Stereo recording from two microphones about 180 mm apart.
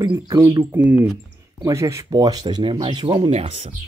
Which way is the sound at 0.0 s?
20° right (ahead or behind).